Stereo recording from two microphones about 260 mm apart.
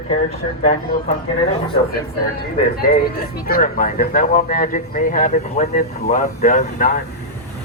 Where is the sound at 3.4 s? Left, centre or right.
Left.